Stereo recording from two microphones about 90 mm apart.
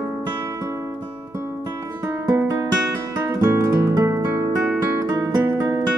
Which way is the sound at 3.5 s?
35° right (ahead or behind).